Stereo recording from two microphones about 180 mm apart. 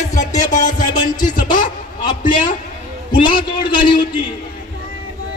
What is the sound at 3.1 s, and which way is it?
Speech, 25° left (ahead or behind).